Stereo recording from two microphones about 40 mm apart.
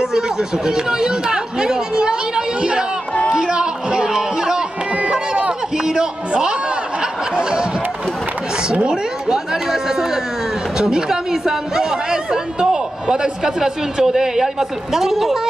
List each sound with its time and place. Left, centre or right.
0.0 s chatter: centre
3.3 s a sound: centre
5.9 s music: centre
9.3 s chatter: centre
10.8 s speech: centre